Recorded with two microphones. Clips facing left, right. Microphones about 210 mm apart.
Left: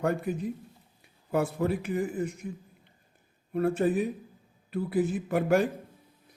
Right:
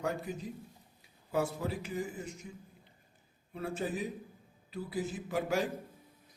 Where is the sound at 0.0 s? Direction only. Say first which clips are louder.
Left 7 dB; 60° left (ahead or behind).